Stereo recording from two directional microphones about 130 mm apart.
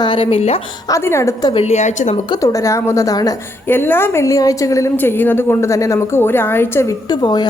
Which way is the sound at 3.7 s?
15° left (ahead or behind).